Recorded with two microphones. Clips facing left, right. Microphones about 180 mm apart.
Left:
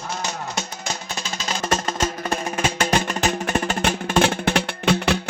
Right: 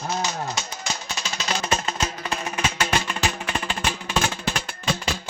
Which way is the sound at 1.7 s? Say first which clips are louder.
Left 3 dB; 50° left (ahead or behind).